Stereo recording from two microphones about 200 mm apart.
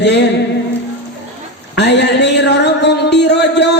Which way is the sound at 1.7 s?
60° left (ahead or behind).